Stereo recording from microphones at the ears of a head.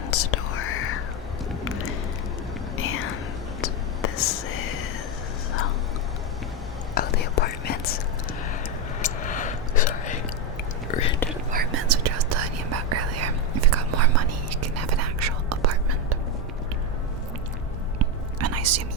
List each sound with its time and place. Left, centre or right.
0.1 s whispering: left
2.7 s whispering: left
6.9 s whispering: left
9.0 s a sound: left
11.5 s whispering: right
18.0 s whispering: right